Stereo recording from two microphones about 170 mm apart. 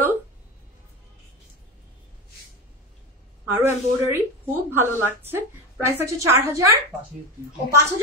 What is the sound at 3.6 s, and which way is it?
A woman's voice, 15° right (ahead or behind).